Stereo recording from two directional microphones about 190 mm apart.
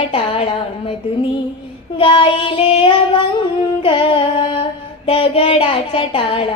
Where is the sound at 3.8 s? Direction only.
25° left (ahead or behind).